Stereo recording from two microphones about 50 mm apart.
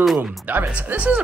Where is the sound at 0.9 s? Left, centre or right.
Right.